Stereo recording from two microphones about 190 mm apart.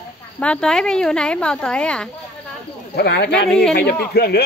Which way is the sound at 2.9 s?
60° left (ahead or behind).